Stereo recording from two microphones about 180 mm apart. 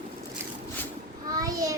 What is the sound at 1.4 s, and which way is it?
Child singing, 20° right (ahead or behind).